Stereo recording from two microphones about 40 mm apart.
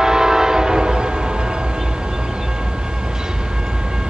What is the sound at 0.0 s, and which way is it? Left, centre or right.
Train horn, centre.